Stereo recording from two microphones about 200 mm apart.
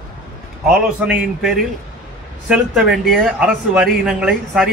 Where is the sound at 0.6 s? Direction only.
5° right (ahead or behind).